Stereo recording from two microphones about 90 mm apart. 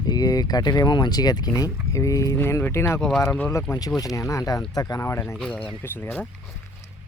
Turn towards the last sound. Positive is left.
turn(degrees=25)  # may be behind; listen again after turning